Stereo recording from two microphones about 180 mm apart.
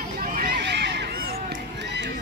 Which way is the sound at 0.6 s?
70° right (ahead or behind).